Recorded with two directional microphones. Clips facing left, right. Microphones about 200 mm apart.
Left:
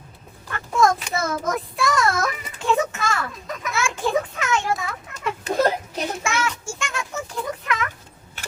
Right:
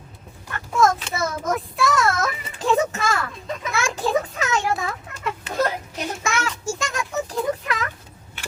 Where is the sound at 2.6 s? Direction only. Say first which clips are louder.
Right 2 dB; 35° right (ahead or behind).